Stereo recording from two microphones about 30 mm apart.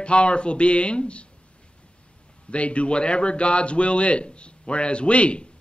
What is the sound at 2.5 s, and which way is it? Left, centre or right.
Speech, left.